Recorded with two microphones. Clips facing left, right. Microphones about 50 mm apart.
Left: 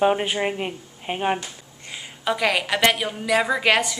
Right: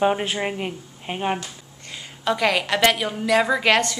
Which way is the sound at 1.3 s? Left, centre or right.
Centre.